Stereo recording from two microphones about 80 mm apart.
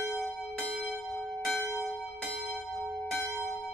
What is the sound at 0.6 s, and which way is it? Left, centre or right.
Church bell, centre.